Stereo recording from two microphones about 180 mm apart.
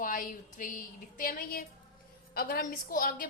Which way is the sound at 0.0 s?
50° left (ahead or behind).